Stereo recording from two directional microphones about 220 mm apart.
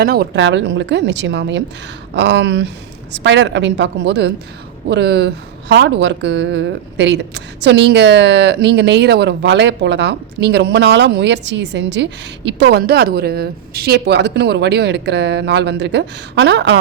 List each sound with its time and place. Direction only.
0.0 s a woman's voice: 45° right (ahead or behind)